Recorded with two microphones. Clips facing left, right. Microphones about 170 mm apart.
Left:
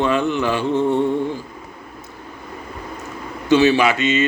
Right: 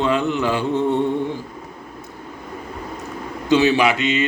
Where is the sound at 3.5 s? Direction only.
15° right (ahead or behind).